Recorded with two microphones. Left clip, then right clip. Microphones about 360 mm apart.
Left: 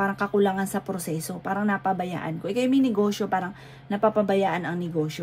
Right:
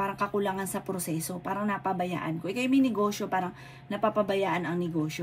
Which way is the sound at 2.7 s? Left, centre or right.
Left.